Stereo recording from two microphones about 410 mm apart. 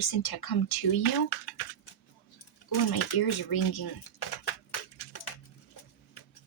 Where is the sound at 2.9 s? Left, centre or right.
Left.